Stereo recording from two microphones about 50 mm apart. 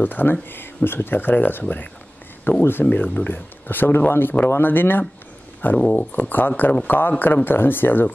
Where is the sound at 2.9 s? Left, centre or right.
Left.